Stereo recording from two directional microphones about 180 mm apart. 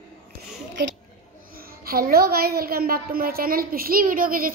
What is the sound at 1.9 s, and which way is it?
A woman's voice, 55° right (ahead or behind).